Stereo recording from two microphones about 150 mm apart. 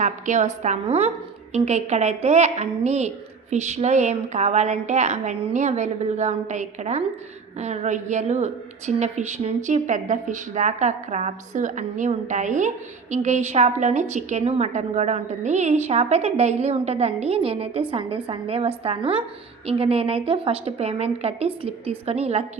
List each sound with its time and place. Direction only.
0.0 s a woman's voice: 55° right (ahead or behind)